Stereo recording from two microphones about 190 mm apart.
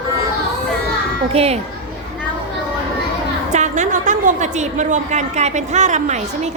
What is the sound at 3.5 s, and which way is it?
A woman's voice, 40° right (ahead or behind).